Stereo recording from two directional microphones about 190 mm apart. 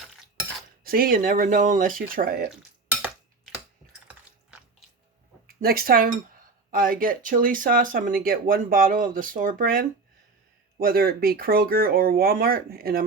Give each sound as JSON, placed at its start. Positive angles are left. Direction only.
{"t": 0.9, "sound": "speech", "side_deg": -50}
{"t": 5.5, "sound": "speech", "side_deg": -50}